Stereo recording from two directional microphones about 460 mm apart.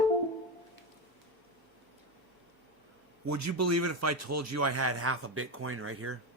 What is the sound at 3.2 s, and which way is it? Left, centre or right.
Speech, right.